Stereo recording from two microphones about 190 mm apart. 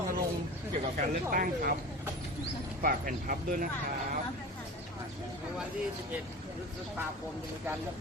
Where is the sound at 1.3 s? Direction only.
50° right (ahead or behind).